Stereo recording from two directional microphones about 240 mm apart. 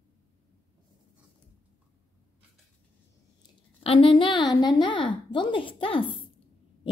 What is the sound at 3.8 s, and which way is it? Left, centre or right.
A woman's voice, left.